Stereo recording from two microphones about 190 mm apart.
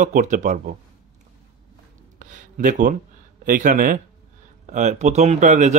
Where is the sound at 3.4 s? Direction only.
45° right (ahead or behind).